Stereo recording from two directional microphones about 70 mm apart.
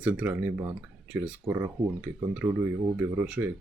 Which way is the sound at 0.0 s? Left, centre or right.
Right.